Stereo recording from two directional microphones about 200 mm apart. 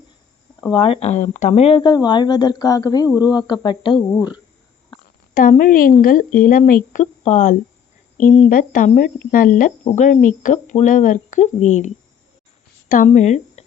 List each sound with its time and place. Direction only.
0.7 s speech: 25° left (ahead or behind)
5.3 s speech: 40° left (ahead or behind)
13.1 s speech: 35° left (ahead or behind)